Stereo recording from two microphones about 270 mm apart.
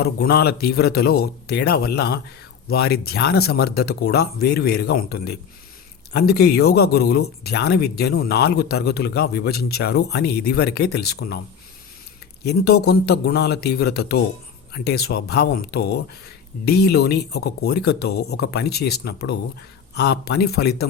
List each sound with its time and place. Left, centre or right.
0.0 s speech: left
12.4 s speech: left